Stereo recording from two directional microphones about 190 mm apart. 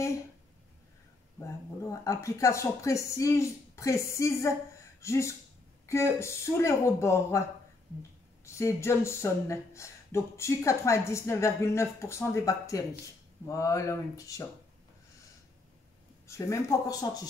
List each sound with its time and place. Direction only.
1.4 s speech: 15° left (ahead or behind)
8.5 s speech: 15° left (ahead or behind)
16.3 s speech: 15° left (ahead or behind)